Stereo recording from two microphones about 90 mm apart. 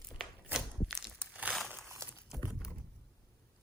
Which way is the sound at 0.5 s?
Centre (ahead or behind).